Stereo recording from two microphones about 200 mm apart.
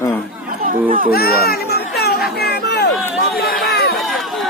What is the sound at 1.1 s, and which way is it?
Children playing, 50° left (ahead or behind).